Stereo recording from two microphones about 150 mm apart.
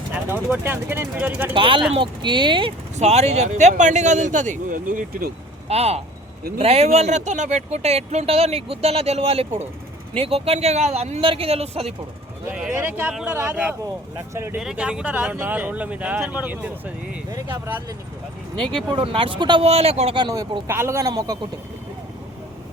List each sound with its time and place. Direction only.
0.1 s speech: 10° right (ahead or behind)
1.5 s speech: 35° right (ahead or behind)
2.9 s speech: 45° right (ahead or behind); by 5.3 s 70° right (ahead or behind)
5.6 s speech: 45° right (ahead or behind)
12.5 s speech: 10° right (ahead or behind)
14.6 s speech: 5° right (ahead or behind)
18.5 s speech: centre (ahead or behind)
18.9 s speech: 35° right (ahead or behind)
20.1 s speech: 25° right (ahead or behind)